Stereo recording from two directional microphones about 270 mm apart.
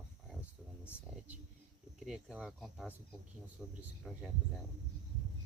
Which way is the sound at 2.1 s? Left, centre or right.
Centre.